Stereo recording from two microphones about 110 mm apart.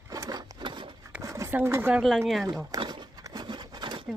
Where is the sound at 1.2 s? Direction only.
30° right (ahead or behind).